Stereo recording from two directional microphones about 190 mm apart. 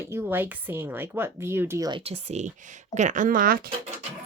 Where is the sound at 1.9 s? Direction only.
30° right (ahead or behind); by 3.6 s 45° right (ahead or behind).